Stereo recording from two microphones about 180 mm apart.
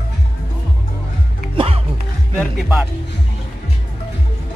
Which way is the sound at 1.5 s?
35° right (ahead or behind).